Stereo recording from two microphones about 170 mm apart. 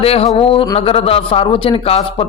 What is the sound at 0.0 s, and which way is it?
A man's voice, 35° left (ahead or behind).